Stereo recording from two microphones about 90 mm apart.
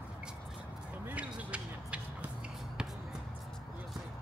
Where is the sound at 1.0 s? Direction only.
15° right (ahead or behind).